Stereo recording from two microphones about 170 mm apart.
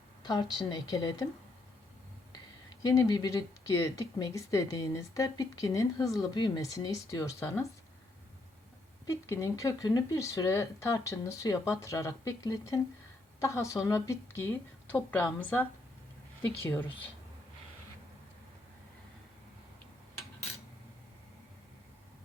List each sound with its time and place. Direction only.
0.2 s speech: 20° left (ahead or behind)
2.6 s speech: 20° left (ahead or behind)
9.0 s speech: 15° left (ahead or behind)